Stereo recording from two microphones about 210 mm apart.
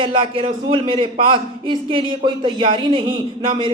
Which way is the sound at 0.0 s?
25° right (ahead or behind).